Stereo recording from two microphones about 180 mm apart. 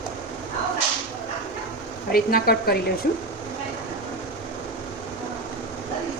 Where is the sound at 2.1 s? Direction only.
55° left (ahead or behind).